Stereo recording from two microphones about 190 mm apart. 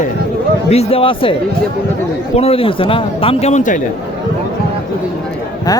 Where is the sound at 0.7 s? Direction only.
30° left (ahead or behind).